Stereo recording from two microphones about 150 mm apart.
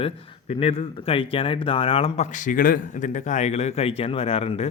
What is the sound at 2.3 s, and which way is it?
Speech, 65° left (ahead or behind).